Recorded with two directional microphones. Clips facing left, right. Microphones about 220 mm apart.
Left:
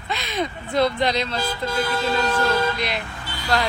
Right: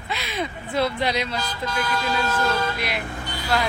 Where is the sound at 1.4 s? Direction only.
25° left (ahead or behind).